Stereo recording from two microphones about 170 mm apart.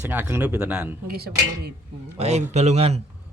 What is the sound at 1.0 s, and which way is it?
Speech, 65° right (ahead or behind).